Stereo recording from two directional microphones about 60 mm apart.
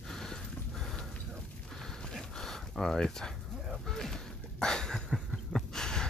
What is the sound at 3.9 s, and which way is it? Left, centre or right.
Mechanisms, centre.